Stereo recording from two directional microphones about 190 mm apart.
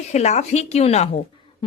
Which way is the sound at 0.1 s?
35° left (ahead or behind).